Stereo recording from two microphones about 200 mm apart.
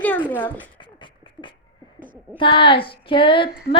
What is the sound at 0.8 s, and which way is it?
Beatboxing, 25° left (ahead or behind).